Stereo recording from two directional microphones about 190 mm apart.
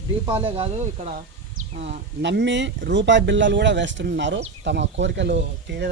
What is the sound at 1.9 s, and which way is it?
Speech, 60° right (ahead or behind).